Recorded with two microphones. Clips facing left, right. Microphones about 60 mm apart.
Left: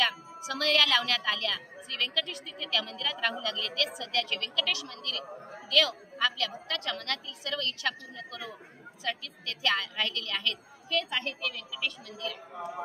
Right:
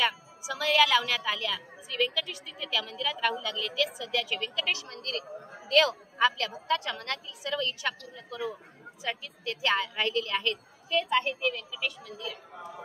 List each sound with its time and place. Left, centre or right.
0.0 s a woman's voice: centre
4.6 s a woman's voice: right
6.8 s a woman's voice: centre